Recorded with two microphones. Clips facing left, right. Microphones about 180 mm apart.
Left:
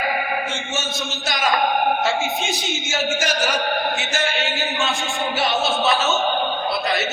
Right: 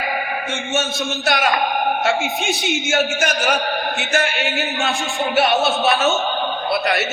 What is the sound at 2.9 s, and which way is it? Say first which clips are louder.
A man's voice: right 2 dB; 55° right (ahead or behind).